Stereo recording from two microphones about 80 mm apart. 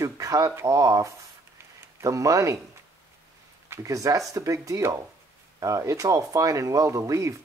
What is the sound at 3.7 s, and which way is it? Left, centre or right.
Speech, right.